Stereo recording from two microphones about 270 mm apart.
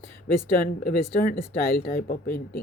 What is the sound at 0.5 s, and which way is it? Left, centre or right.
Speech, left.